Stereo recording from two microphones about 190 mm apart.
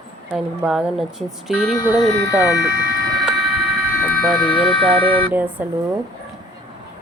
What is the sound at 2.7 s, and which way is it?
Speech, 50° left (ahead or behind).